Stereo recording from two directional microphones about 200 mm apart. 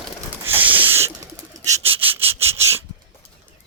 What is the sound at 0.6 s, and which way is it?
Owl, 10° right (ahead or behind).